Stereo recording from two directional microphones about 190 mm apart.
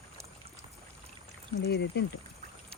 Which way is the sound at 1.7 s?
60° left (ahead or behind).